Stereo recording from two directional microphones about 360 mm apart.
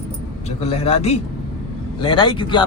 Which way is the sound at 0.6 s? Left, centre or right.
Centre.